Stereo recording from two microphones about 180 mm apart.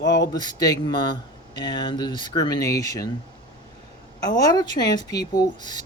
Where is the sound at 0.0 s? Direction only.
85° left.